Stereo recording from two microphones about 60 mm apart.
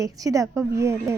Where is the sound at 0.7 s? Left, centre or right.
Right.